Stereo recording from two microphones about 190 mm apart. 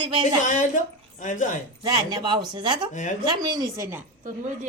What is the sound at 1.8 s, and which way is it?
Speech, 20° right (ahead or behind).